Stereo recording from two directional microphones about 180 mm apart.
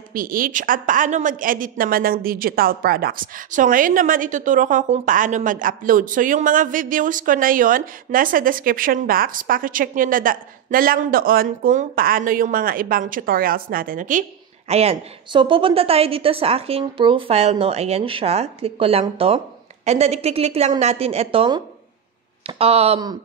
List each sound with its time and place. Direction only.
0.1 s a woman's voice: 50° right (ahead or behind)
14.7 s a woman's voice: 35° right (ahead or behind)